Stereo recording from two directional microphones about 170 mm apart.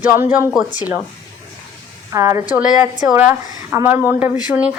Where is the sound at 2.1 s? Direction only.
15° right (ahead or behind).